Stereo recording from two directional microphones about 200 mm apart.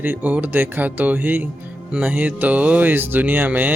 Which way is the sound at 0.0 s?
10° right (ahead or behind).